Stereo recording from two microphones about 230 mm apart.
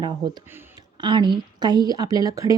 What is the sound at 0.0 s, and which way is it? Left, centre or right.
A woman's voice, centre.